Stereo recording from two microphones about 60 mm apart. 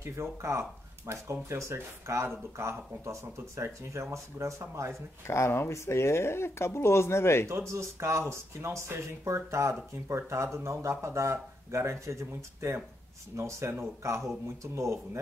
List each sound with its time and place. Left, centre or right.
0.0 s speech: right
5.2 s speech: left
7.4 s speech: right